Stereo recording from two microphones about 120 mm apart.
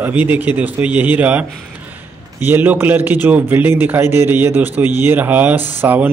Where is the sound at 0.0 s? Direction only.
15° right (ahead or behind).